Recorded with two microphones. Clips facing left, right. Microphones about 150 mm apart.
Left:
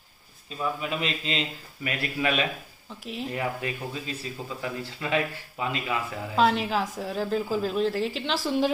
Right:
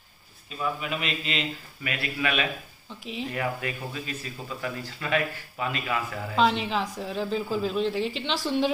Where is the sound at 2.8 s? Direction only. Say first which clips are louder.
Even; centre (ahead or behind).